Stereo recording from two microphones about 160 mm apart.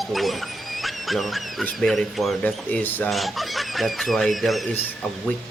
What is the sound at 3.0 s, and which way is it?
Speech, centre (ahead or behind).